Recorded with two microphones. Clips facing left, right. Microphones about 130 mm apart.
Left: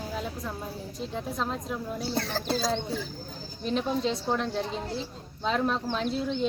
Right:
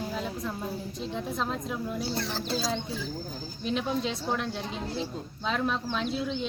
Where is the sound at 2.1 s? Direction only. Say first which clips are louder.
Left 2 dB; 55° left (ahead or behind).